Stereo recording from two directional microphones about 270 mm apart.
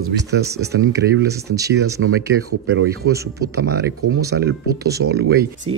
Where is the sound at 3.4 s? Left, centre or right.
Right.